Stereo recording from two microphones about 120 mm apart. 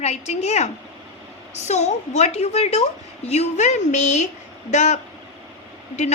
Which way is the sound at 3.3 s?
70° left (ahead or behind).